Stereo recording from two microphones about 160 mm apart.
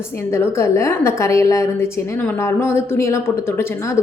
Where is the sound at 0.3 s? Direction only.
15° left (ahead or behind).